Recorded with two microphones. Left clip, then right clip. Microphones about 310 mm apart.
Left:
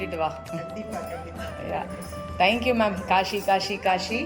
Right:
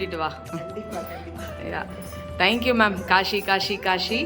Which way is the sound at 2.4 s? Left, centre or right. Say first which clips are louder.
Even; right.